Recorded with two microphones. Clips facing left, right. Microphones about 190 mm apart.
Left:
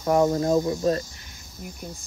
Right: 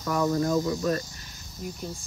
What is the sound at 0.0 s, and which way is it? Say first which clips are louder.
Speech: left 5 dB; 35° left (ahead or behind).